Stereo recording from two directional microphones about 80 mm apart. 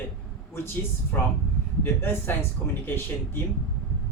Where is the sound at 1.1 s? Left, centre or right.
Left.